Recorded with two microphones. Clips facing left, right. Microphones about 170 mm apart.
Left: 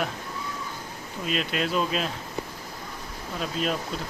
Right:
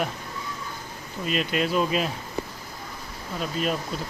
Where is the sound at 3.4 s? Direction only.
Centre (ahead or behind).